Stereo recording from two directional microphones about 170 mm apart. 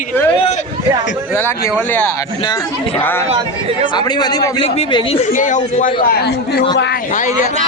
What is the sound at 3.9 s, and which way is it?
A man's voice, 25° left (ahead or behind).